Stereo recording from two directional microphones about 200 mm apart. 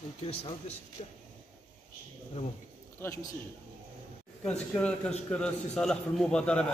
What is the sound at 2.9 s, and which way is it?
Speech, 10° left (ahead or behind).